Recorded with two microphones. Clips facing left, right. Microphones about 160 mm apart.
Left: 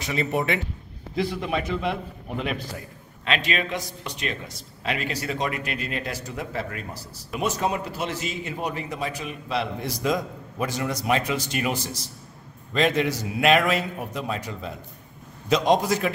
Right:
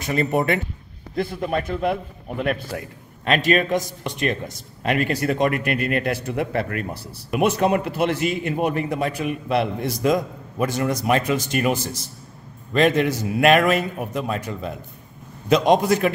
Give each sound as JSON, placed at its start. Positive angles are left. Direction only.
{"t": 0.0, "sound": "a man's voice", "side_deg": -50}
{"t": 12.7, "sound": "a man's voice", "side_deg": -55}